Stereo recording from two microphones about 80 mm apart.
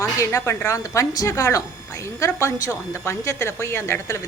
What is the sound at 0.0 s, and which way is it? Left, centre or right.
A woman's voice, left.